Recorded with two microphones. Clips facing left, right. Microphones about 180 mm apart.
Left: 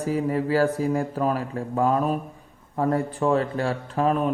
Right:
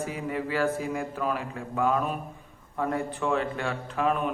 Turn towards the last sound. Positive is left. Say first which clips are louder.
# left 4 dB
turn(degrees=35)  # may be behind; listen again after turning